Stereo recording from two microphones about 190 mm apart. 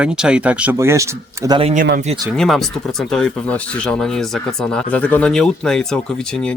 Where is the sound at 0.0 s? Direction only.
5° right (ahead or behind).